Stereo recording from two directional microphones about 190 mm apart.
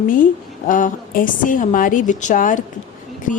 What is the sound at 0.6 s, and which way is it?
Speech, 45° left (ahead or behind).